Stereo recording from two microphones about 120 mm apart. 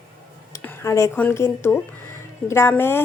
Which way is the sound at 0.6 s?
25° left (ahead or behind).